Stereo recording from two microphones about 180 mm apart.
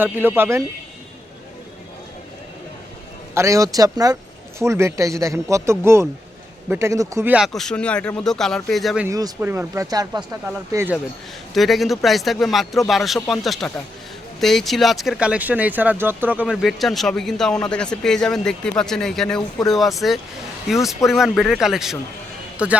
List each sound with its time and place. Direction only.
0.0 s speech: 10° right (ahead or behind)
3.3 s speech: 15° right (ahead or behind)
7.3 s speech: centre (ahead or behind)
9.0 s speech: 15° right (ahead or behind)
11.5 s speech: centre (ahead or behind)